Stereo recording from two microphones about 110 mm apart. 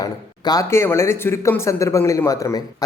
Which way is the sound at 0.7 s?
25° left (ahead or behind).